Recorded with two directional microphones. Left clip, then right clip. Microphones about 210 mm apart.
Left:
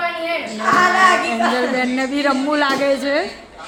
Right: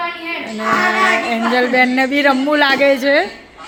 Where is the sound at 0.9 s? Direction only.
20° right (ahead or behind).